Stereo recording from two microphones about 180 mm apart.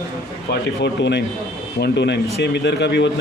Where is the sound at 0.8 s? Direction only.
75° left (ahead or behind).